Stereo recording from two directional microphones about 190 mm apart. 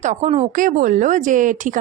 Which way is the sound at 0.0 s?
35° right (ahead or behind).